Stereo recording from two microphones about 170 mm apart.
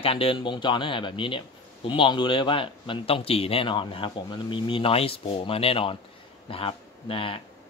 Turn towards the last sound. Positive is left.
turn(degrees=30)  # may be behind; listen again after turning